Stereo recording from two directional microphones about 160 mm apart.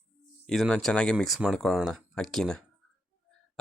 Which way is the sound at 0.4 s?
Centre (ahead or behind).